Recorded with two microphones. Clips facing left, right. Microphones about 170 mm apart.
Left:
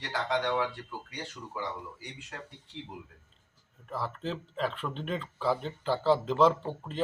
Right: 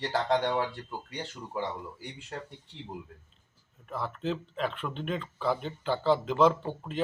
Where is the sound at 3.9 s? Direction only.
Centre (ahead or behind).